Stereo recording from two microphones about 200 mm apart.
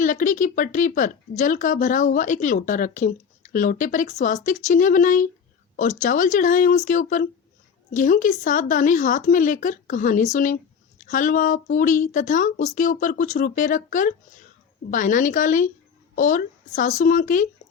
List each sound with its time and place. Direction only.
0.0 s speech: 40° left (ahead or behind)